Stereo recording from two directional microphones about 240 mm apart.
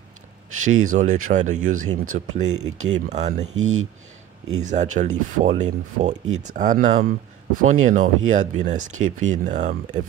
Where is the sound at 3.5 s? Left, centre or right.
Right.